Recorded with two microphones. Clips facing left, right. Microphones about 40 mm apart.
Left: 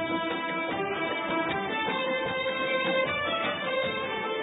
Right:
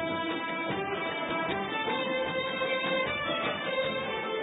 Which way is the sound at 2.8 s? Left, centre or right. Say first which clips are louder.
Left 3 dB; centre.